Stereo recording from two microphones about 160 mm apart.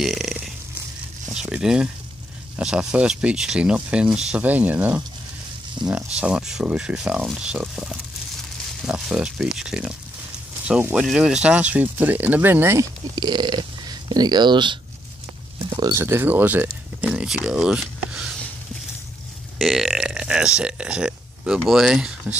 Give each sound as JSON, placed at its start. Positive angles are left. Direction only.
{"t": 0.0, "sound": "a sound", "side_deg": 0}
{"t": 1.3, "sound": "speech", "side_deg": -5}
{"t": 5.8, "sound": "speech", "side_deg": -30}
{"t": 6.1, "sound": "speech", "side_deg": -5}
{"t": 13.1, "sound": "speech", "side_deg": -25}
{"t": 15.6, "sound": "a sound", "side_deg": -30}
{"t": 15.9, "sound": "speech", "side_deg": -15}
{"t": 19.6, "sound": "speech", "side_deg": 0}